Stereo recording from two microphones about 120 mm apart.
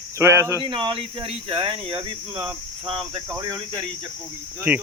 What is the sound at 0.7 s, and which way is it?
Cricket, 45° right (ahead or behind).